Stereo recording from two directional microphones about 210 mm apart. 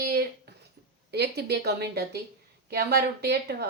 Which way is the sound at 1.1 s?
50° right (ahead or behind).